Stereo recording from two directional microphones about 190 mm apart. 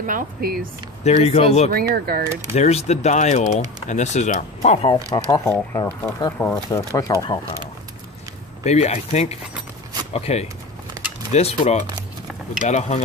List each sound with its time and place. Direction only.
0.0 s speech: 50° right (ahead or behind)
1.0 s speech: 35° left (ahead or behind)
1.7 s speech: 50° right (ahead or behind)
2.5 s speech: 35° left (ahead or behind)
5.1 s speech: 15° left (ahead or behind)
8.6 s speech: 35° left (ahead or behind)